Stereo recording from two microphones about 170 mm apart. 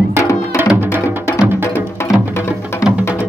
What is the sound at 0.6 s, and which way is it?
Music, 10° right (ahead or behind).